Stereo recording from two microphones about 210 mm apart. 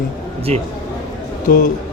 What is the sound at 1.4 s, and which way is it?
Speech, 45° left (ahead or behind).